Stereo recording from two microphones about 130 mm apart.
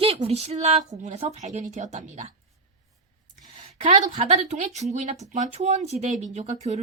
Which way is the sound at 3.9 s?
60° right (ahead or behind).